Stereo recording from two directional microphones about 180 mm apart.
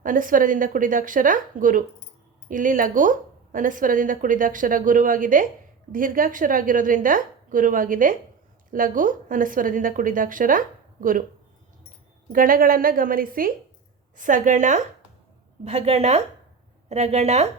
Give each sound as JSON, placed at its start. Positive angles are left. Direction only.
{"t": 0.0, "sound": "a woman's voice", "side_deg": -50}
{"t": 12.3, "sound": "a woman's voice", "side_deg": -50}